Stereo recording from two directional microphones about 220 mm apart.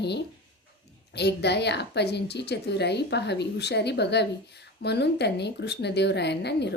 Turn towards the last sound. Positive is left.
turn(degrees=50)  # may be behind; listen again after turning